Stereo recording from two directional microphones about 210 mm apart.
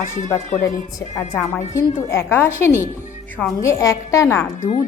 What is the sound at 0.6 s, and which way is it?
A woman's voice, 15° left (ahead or behind).